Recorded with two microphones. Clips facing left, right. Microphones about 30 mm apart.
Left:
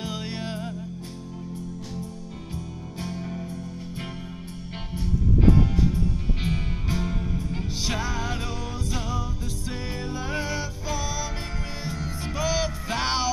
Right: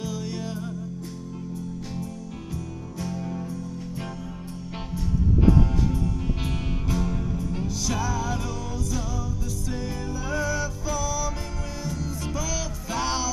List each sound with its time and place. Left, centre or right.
0.0 s music: left
2.5 s music: left
4.9 s music: left
9.7 s music: left